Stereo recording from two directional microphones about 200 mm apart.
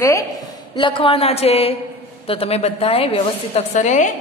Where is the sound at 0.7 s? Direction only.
25° left (ahead or behind).